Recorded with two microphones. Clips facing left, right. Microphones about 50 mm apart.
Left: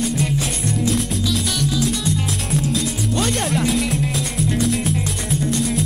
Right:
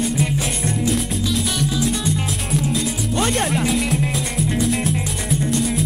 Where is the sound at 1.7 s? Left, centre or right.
Right; by 5.9 s centre.